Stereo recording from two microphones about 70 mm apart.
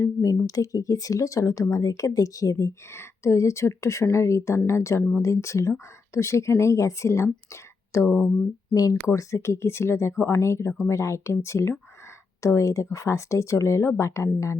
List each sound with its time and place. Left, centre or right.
0.0 s a woman's voice: left
8.7 s speech: left
9.0 s a woman's voice: left